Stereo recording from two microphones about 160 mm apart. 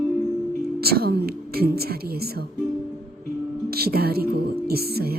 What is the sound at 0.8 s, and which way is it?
A woman's voice, 75° right (ahead or behind).